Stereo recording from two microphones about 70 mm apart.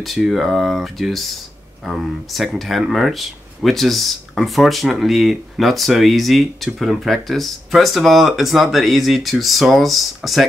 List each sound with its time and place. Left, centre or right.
0.0 s speech: centre